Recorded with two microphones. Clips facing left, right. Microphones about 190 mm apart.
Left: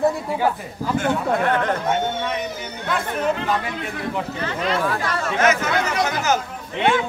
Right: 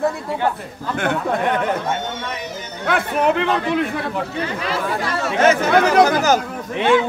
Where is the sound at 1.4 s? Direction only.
15° right (ahead or behind).